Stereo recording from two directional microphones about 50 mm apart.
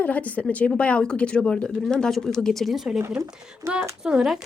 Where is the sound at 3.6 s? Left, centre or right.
Right.